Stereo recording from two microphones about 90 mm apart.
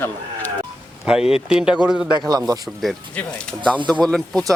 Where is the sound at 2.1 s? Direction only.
50° right (ahead or behind).